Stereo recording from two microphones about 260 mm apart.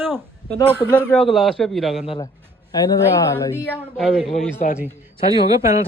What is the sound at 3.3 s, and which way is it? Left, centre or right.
Speech, centre.